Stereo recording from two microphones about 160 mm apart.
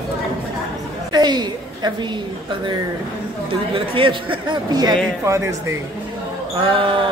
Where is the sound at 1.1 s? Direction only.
25° right (ahead or behind).